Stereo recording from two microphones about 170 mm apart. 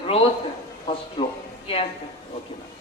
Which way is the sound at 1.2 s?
30° left (ahead or behind).